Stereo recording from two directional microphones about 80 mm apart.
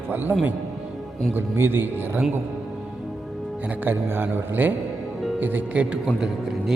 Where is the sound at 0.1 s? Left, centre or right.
Right.